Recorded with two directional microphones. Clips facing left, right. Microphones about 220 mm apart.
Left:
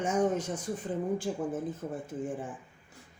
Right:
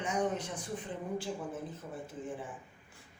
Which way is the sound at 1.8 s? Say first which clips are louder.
Left 8 dB; 50° left (ahead or behind).